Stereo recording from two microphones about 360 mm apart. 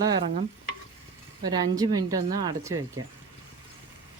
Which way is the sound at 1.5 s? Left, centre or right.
Centre.